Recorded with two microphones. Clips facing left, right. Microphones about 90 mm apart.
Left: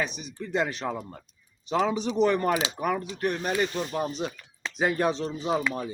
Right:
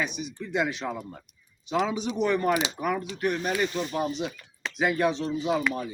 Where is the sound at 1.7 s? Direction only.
40° left (ahead or behind).